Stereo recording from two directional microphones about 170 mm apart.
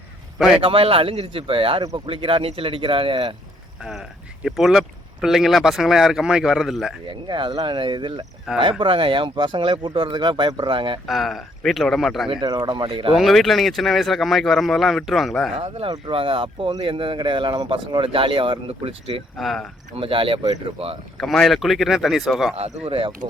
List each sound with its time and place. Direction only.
0.3 s speech: centre (ahead or behind)
0.6 s speech: 35° right (ahead or behind)
3.8 s speech: 5° right (ahead or behind)
7.1 s speech: 30° right (ahead or behind)
11.0 s speech: centre (ahead or behind)
12.3 s speech: 25° right (ahead or behind)
13.1 s speech: centre (ahead or behind)
15.5 s speech: 35° right (ahead or behind)
19.4 s speech: centre (ahead or behind)
20.0 s speech: 30° right (ahead or behind)
21.2 s speech: centre (ahead or behind)
22.5 s speech: 35° right (ahead or behind)